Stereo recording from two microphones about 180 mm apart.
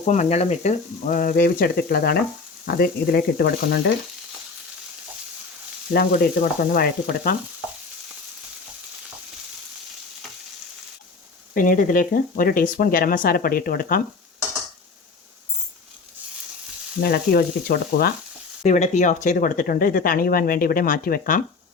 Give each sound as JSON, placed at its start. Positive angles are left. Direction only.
{"t": 0.0, "sound": "speech", "side_deg": 40}
{"t": 2.6, "sound": "frying", "side_deg": 60}
{"t": 6.1, "sound": "speech", "side_deg": 50}
{"t": 11.5, "sound": "speech", "side_deg": 50}
{"t": 17.0, "sound": "frying", "side_deg": 60}
{"t": 18.6, "sound": "speech", "side_deg": 40}